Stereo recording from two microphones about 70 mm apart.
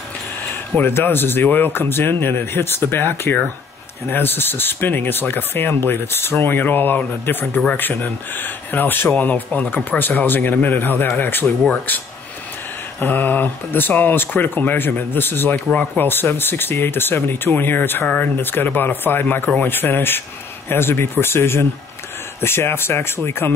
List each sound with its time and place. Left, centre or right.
0.7 s speech: left
13.0 s speech: left